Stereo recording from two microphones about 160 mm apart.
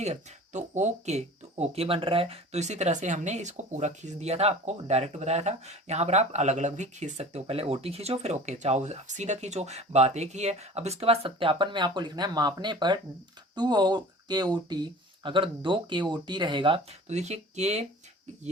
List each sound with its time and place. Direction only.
0.0 s speech: 45° right (ahead or behind)